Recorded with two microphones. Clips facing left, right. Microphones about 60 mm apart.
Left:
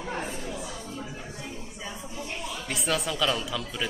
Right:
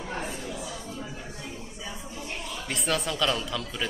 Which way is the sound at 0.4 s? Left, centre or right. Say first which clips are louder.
Even; left.